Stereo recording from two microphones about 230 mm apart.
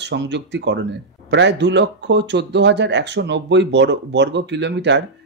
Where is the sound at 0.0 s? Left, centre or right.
Right.